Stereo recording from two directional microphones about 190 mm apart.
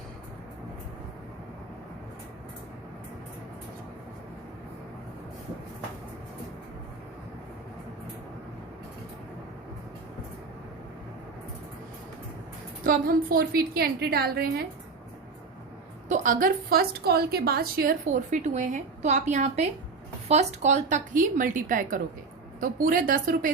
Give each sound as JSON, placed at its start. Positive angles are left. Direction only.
{"t": 12.8, "sound": "a woman's voice", "side_deg": -50}
{"t": 16.0, "sound": "a woman's voice", "side_deg": -40}